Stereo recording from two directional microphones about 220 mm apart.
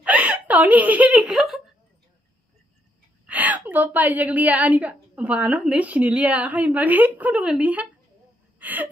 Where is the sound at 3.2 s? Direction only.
5° right (ahead or behind).